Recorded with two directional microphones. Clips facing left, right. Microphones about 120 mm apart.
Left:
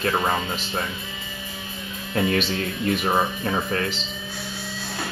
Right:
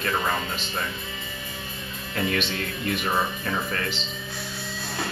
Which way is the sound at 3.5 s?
30° left (ahead or behind).